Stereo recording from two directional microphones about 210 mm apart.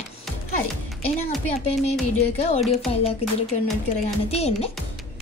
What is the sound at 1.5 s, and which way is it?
A woman's voice, 30° left (ahead or behind).